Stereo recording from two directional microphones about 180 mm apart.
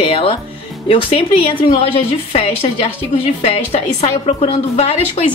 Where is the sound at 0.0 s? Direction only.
30° left (ahead or behind).